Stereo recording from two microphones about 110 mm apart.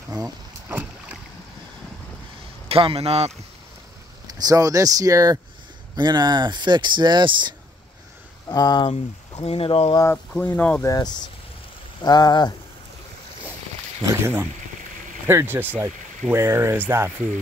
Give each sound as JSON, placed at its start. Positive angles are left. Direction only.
{"t": 0.7, "sound": "boat", "side_deg": -15}
{"t": 2.7, "sound": "a man's voice", "side_deg": -60}
{"t": 4.3, "sound": "speech", "side_deg": -35}
{"t": 8.5, "sound": "a sound", "side_deg": 35}
{"t": 9.4, "sound": "speech", "side_deg": 60}
{"t": 10.1, "sound": "speech", "side_deg": 15}
{"t": 10.9, "sound": "a sound", "side_deg": 40}
{"t": 14.0, "sound": "speech", "side_deg": -20}